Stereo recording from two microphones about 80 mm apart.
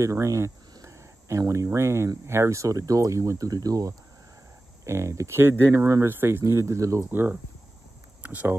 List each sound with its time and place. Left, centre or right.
0.0 s speech: right
4.8 s speech: right
7.1 s speech: right